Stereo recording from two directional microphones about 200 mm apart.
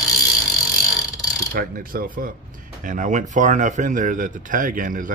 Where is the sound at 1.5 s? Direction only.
45° right (ahead or behind).